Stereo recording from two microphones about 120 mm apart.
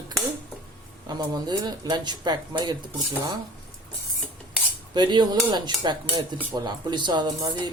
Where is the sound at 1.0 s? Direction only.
35° right (ahead or behind).